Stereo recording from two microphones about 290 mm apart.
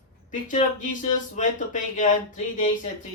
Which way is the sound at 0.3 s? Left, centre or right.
Left.